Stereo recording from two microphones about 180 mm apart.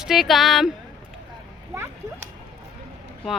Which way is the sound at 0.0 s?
Centre (ahead or behind).